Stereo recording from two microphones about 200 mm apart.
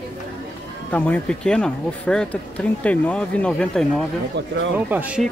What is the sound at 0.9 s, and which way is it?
Speech, 5° left (ahead or behind).